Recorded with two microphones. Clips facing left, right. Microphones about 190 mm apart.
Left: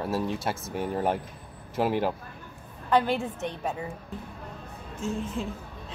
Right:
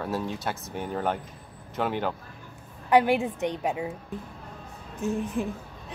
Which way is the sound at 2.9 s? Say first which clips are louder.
Right 3 dB; 15° right (ahead or behind).